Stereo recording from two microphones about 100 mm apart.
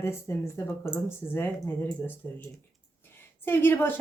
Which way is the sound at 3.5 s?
20° left (ahead or behind).